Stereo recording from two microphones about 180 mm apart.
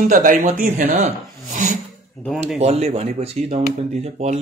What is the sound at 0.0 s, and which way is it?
A man's voice, 45° right (ahead or behind).